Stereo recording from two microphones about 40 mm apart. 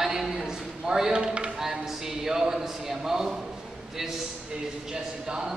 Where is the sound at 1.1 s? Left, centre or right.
Right.